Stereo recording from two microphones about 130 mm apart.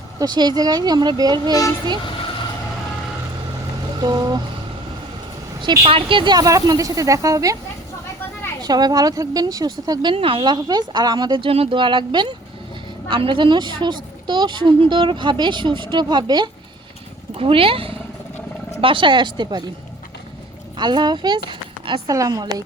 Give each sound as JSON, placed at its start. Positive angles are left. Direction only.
{"t": 0.2, "sound": "speech", "side_deg": -35}
{"t": 4.0, "sound": "speech", "side_deg": -30}
{"t": 5.8, "sound": "speech", "side_deg": -45}
{"t": 8.6, "sound": "speech", "side_deg": -30}
{"t": 17.3, "sound": "speech", "side_deg": -45}
{"t": 20.7, "sound": "speech", "side_deg": -35}